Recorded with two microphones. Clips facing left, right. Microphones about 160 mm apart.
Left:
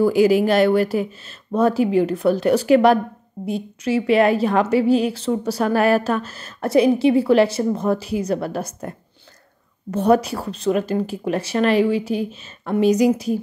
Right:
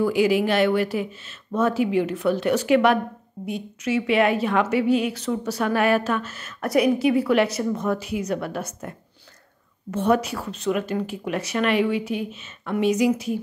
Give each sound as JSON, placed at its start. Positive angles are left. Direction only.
{"t": 0.0, "sound": "a woman's voice", "side_deg": 40}